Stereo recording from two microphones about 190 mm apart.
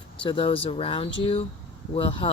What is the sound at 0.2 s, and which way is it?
Speech, 25° left (ahead or behind).